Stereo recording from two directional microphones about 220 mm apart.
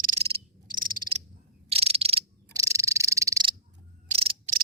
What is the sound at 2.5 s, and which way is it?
Frog, 15° right (ahead or behind).